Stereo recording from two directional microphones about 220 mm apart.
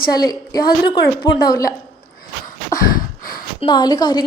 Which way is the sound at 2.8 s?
40° left (ahead or behind).